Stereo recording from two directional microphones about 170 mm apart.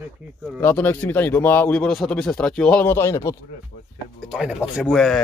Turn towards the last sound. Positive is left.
turn(degrees=5)  # may be behind; listen again after turning